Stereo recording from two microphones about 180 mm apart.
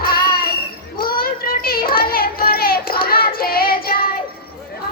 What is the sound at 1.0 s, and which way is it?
Child singing, 55° left (ahead or behind).